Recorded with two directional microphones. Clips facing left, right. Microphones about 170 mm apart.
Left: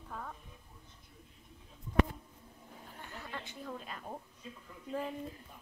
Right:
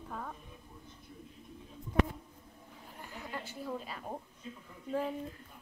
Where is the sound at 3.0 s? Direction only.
5° right (ahead or behind).